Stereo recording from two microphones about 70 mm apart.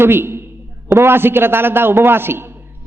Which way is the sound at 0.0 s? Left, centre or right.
Right.